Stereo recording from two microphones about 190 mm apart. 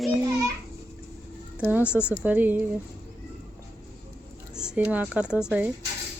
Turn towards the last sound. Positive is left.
turn(degrees=-5)  # may be behind; listen again after turning